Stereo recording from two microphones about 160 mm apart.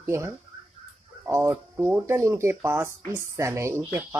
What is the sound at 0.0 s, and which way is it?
Speech, 15° right (ahead or behind).